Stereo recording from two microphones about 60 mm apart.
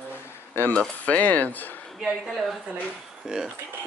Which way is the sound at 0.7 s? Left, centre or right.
Left.